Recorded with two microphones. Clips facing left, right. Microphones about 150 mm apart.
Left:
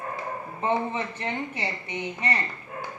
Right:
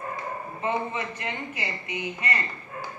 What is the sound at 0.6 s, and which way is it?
A woman's voice, 30° left (ahead or behind).